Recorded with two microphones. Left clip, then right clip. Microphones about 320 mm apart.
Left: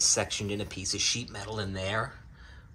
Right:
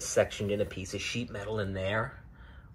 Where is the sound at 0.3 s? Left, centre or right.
Centre.